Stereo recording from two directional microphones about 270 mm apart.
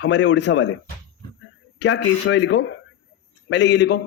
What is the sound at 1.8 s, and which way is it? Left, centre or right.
Speech, left.